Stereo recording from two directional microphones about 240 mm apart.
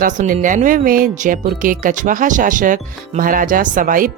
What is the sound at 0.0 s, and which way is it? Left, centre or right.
Speech, right.